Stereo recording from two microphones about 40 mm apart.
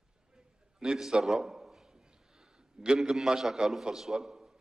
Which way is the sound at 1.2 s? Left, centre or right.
Centre.